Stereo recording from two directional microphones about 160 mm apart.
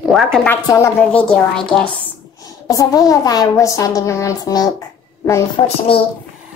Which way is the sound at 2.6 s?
20° left (ahead or behind).